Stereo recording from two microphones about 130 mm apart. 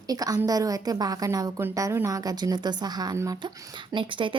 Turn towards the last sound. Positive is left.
turn(degrees=-40)  # may be behind; listen again after turning